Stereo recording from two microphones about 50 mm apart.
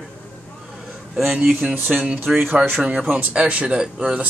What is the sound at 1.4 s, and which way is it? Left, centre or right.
Speech, right.